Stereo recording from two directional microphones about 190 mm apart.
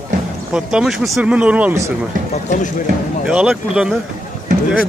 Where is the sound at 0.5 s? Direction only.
5° right (ahead or behind).